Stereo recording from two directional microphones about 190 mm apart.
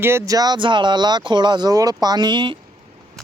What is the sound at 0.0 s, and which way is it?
Speech, 15° right (ahead or behind).